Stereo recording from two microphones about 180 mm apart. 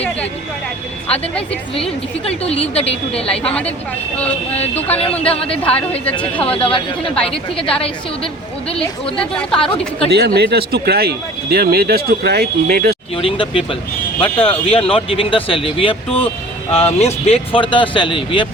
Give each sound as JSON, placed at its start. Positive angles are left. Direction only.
{"t": 1.7, "sound": "speech", "side_deg": 30}
{"t": 3.4, "sound": "a woman's voice", "side_deg": 5}
{"t": 6.4, "sound": "speech", "side_deg": 30}
{"t": 9.1, "sound": "a woman's voice", "side_deg": 5}
{"t": 10.1, "sound": "speech", "side_deg": -65}
{"t": 13.1, "sound": "speech", "side_deg": 30}